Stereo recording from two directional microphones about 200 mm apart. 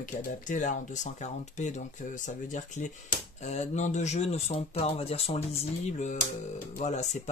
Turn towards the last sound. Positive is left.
turn(degrees=35)  # may be behind; listen again after turning